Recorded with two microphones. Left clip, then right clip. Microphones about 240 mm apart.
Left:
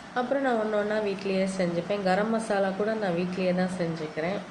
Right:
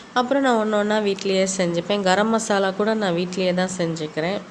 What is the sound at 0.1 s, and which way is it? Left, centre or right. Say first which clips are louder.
A woman's voice: right 7 dB; right.